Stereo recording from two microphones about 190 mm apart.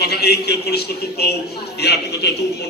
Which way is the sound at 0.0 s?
55° left (ahead or behind).